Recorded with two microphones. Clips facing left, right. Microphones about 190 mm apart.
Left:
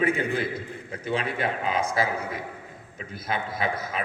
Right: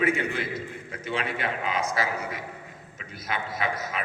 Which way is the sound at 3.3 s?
30° left (ahead or behind).